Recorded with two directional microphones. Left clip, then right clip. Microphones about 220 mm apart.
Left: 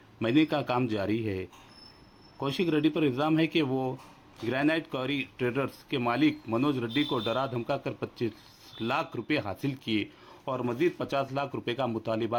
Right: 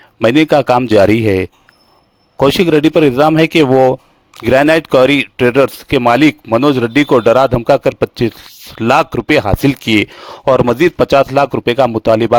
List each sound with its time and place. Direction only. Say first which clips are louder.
0.2 s speech: right 17 dB; 50° right (ahead or behind)